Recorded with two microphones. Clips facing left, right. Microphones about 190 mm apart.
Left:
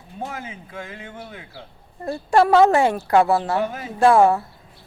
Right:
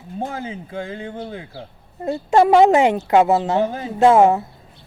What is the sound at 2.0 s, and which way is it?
Speech, 20° right (ahead or behind).